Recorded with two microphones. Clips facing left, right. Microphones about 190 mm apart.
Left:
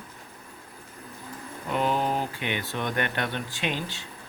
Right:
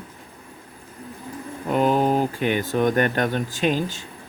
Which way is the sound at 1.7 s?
45° right (ahead or behind).